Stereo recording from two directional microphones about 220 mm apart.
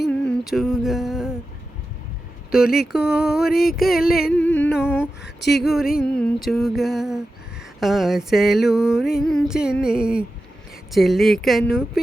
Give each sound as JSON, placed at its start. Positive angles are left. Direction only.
{"t": 0.2, "sound": "a sound", "side_deg": 0}
{"t": 2.9, "sound": "music", "side_deg": -5}
{"t": 3.5, "sound": "a sound", "side_deg": 45}
{"t": 3.8, "sound": "music", "side_deg": 0}
{"t": 4.6, "sound": "humming", "side_deg": 5}
{"t": 5.6, "sound": "music", "side_deg": 0}